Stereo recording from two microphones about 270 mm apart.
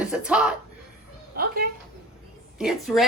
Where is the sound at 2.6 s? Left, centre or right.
Centre.